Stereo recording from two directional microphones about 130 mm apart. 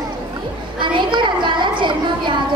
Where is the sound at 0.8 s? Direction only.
35° right (ahead or behind).